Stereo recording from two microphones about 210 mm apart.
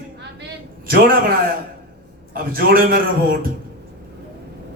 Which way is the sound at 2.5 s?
45° right (ahead or behind).